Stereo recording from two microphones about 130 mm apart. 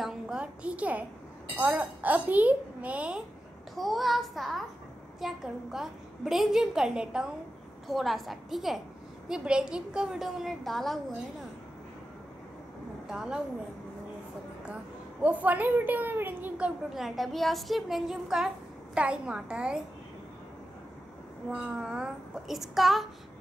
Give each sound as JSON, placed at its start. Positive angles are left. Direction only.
{"t": 0.0, "sound": "a woman's voice", "side_deg": -5}
{"t": 3.7, "sound": "a woman's voice", "side_deg": 0}
{"t": 13.1, "sound": "speech", "side_deg": -5}
{"t": 15.2, "sound": "a woman's voice", "side_deg": -15}
{"t": 21.5, "sound": "a woman's voice", "side_deg": -5}